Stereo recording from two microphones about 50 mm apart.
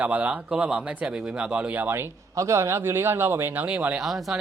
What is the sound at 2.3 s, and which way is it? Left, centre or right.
A man's voice, right.